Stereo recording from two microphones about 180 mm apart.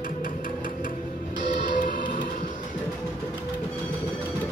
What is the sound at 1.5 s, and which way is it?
Music, 45° left (ahead or behind).